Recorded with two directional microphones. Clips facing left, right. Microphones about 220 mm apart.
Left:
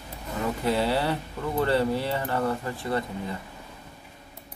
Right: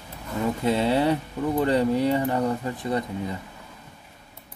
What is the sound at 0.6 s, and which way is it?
Speech, 20° right (ahead or behind).